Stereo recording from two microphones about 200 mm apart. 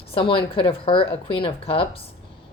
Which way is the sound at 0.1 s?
25° left (ahead or behind).